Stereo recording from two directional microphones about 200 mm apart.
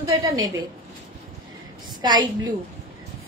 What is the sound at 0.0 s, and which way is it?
Speech, 20° right (ahead or behind).